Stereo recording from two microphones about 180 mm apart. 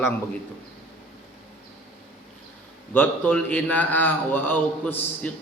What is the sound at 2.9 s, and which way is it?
A man's voice, 10° left (ahead or behind).